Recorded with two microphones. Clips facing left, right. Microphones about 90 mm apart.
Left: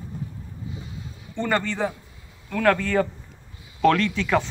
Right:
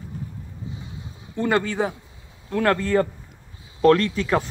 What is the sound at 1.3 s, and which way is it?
Speech, 10° right (ahead or behind).